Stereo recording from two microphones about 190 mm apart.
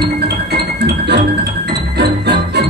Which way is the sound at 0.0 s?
60° right (ahead or behind).